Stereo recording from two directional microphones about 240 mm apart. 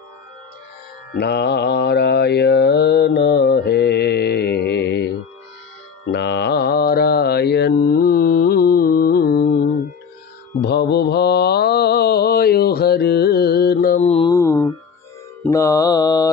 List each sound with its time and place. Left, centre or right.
1.1 s mantra: left
6.1 s mantra: left
14.3 s music: centre
15.4 s mantra: centre